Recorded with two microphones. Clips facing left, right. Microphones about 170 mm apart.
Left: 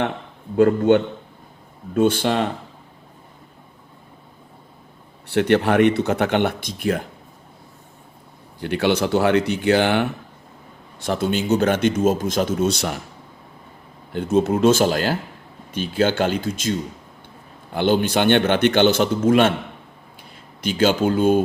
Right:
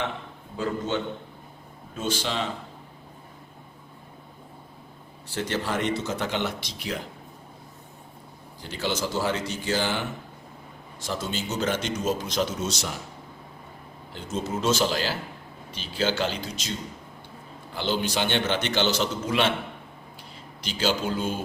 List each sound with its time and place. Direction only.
0.5 s a man's voice: 65° left (ahead or behind)
5.3 s a man's voice: 65° left (ahead or behind)
8.6 s a man's voice: 65° left (ahead or behind)
14.1 s a man's voice: 60° left (ahead or behind)
17.7 s a man's voice: 55° left (ahead or behind)
20.6 s a man's voice: 55° left (ahead or behind)